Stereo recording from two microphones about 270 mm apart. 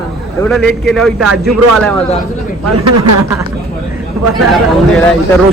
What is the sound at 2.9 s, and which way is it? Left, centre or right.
Speech, right.